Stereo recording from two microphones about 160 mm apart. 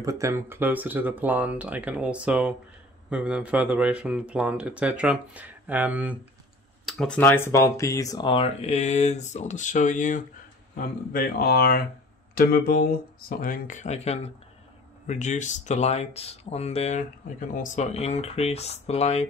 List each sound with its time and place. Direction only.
0.0 s speech: 20° right (ahead or behind)
6.9 s speech: 5° left (ahead or behind); by 10.2 s 50° left (ahead or behind)
10.8 s speech: 65° left (ahead or behind)
13.4 s speech: 55° left (ahead or behind)